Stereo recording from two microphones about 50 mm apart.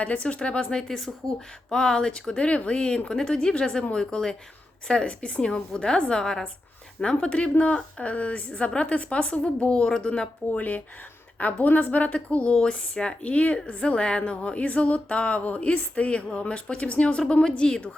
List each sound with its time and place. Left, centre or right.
0.0 s a woman's voice: left
10.6 s a woman's voice: left